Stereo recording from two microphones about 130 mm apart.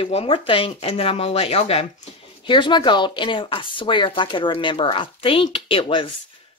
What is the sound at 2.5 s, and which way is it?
Speech, 40° left (ahead or behind).